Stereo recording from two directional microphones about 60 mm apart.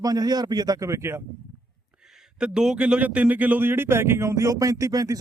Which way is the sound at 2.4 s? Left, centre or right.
Centre.